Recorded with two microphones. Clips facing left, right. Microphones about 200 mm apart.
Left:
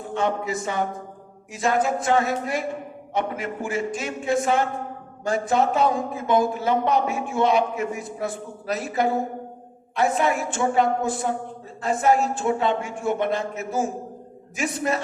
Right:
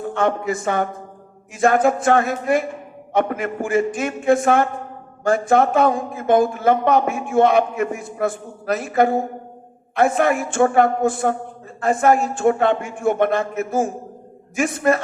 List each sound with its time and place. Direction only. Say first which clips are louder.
0.1 s a man's voice: right 3 dB; 55° right (ahead or behind)